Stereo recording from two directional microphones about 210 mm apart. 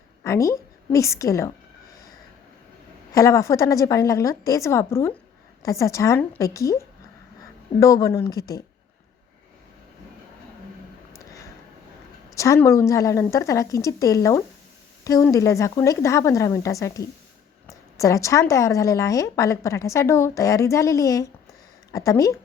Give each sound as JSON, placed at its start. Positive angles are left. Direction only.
{"t": 0.2, "sound": "a woman's voice", "side_deg": 15}
{"t": 3.2, "sound": "a woman's voice", "side_deg": 15}
{"t": 12.4, "sound": "a woman's voice", "side_deg": 15}